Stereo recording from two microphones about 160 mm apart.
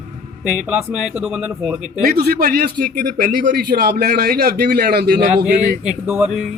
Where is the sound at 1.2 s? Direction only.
5° right (ahead or behind).